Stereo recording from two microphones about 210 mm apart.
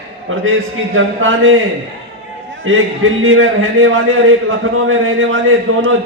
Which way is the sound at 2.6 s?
70° right (ahead or behind).